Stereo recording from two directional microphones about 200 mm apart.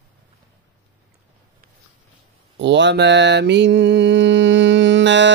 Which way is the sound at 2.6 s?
60° right (ahead or behind).